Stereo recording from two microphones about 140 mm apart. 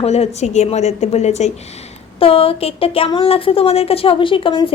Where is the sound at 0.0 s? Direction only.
50° left (ahead or behind).